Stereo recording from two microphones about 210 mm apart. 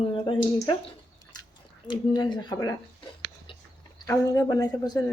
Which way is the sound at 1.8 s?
20° left (ahead or behind).